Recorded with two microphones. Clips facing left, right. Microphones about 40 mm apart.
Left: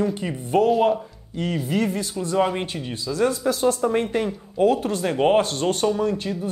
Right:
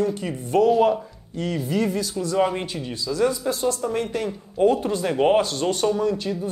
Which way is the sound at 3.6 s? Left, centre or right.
Left.